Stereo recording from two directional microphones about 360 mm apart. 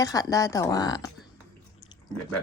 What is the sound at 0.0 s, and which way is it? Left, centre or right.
Speech, centre.